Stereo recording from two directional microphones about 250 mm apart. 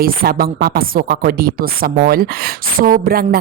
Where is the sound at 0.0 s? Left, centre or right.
Right.